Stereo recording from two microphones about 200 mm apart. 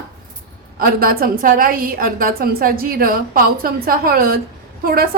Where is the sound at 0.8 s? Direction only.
45° right (ahead or behind).